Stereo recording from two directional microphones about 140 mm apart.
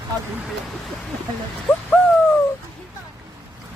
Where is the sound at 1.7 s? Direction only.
15° left (ahead or behind).